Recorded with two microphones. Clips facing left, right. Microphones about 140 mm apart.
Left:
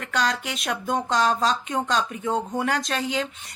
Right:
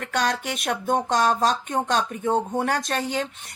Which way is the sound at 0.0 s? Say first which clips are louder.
Right 1 dB; 50° right (ahead or behind).